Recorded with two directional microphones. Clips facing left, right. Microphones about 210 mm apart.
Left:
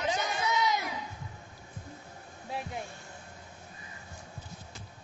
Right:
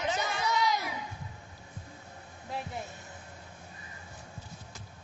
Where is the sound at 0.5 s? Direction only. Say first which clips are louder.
Even; 20° left (ahead or behind).